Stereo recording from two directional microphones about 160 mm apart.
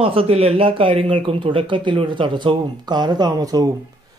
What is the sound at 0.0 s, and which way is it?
Speech, 35° right (ahead or behind).